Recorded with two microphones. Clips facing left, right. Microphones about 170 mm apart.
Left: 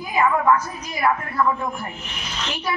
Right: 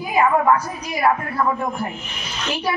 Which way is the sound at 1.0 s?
35° right (ahead or behind).